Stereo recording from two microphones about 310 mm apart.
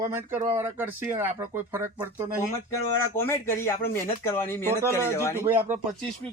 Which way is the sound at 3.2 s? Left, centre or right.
Centre.